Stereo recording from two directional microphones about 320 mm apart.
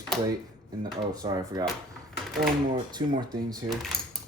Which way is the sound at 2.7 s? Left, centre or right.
Centre.